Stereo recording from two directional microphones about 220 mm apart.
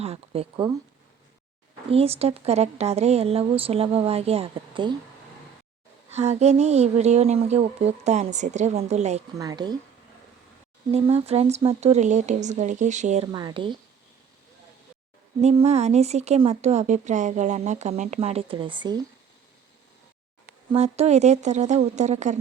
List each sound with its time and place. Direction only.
0.0 s speech: 25° right (ahead or behind)
1.9 s speech: 25° right (ahead or behind)
6.1 s speech: 30° right (ahead or behind)
9.4 s speech: 15° right (ahead or behind)
10.9 s speech: 25° right (ahead or behind)
15.4 s speech: 30° right (ahead or behind)
20.7 s a woman's voice: 30° right (ahead or behind)